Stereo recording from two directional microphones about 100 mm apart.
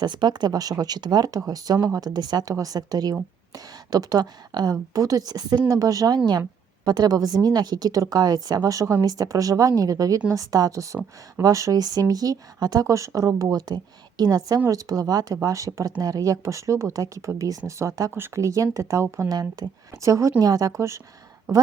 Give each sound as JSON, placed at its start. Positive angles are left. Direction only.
{"t": 0.0, "sound": "speech", "side_deg": -50}
{"t": 19.3, "sound": "speech", "side_deg": -40}